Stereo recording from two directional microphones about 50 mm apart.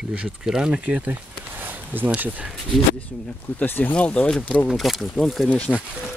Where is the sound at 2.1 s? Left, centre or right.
Right.